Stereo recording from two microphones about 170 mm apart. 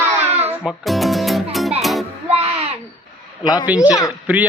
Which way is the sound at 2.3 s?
35° right (ahead or behind).